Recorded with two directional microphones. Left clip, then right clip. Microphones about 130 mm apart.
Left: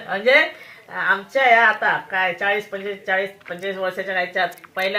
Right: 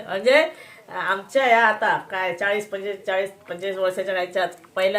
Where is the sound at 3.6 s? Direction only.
50° right (ahead or behind).